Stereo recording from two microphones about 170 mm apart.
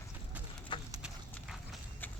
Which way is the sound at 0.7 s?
30° left (ahead or behind).